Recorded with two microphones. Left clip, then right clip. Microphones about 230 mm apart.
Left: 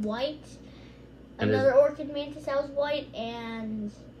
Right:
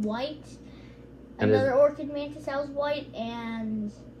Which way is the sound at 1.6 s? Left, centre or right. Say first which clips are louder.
Left 2 dB; left.